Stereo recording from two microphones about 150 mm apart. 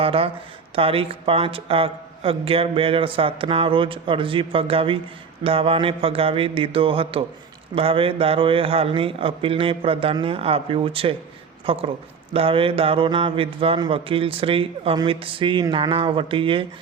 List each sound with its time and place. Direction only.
0.0 s speech: 40° right (ahead or behind)